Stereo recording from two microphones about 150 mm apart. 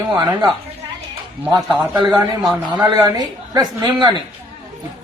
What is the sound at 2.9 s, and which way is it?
A woman's voice, 25° right (ahead or behind).